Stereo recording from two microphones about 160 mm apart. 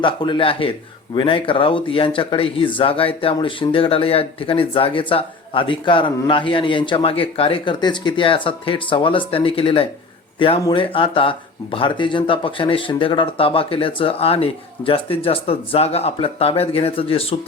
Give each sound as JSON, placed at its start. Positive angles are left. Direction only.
{"t": 0.0, "sound": "speech", "side_deg": 30}